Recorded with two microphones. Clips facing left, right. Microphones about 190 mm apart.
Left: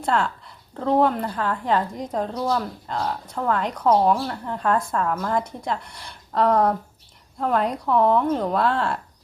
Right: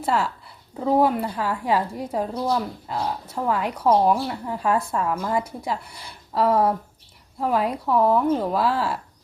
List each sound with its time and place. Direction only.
0.0 s a woman's voice: 5° right (ahead or behind)